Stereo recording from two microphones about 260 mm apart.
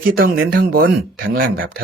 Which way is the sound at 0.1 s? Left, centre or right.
Right.